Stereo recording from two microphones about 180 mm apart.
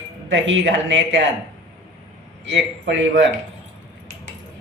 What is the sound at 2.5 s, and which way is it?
Speech, 90° right.